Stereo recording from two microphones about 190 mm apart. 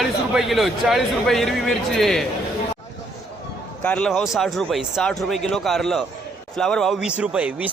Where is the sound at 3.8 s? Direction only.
5° left (ahead or behind).